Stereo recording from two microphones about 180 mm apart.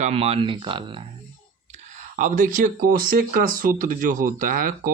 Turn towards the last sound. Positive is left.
turn(degrees=-50)  # may be behind; listen again after turning